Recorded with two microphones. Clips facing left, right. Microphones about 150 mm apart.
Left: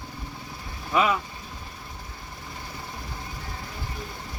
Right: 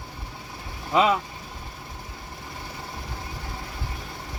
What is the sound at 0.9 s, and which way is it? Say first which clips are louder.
Speech: right 2 dB; 25° right (ahead or behind).